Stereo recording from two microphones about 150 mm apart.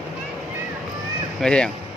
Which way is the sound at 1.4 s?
5° left (ahead or behind).